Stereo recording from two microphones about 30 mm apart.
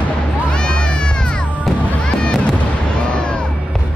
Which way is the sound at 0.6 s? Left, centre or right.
Left.